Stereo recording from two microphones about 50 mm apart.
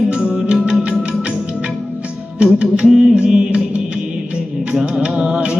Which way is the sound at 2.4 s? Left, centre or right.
Centre.